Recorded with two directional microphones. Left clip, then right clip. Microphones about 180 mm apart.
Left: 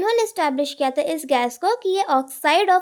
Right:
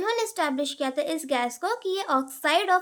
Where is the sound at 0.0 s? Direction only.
25° left (ahead or behind).